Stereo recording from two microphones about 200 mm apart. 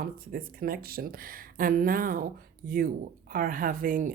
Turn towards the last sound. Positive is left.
turn(degrees=-45)  # may be behind; listen again after turning